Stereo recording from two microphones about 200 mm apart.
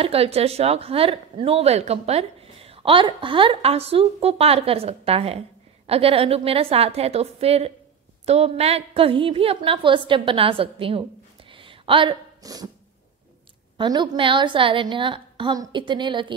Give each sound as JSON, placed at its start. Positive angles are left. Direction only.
{"t": 0.0, "sound": "a woman's voice", "side_deg": -30}
{"t": 11.5, "sound": "a sound", "side_deg": -25}
{"t": 13.7, "sound": "a woman's voice", "side_deg": -20}